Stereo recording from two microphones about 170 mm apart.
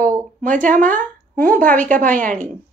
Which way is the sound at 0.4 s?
50° right (ahead or behind).